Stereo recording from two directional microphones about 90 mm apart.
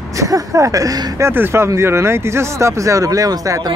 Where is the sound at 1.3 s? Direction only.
25° right (ahead or behind).